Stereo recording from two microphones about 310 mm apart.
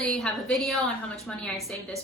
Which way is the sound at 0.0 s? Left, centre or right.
Centre.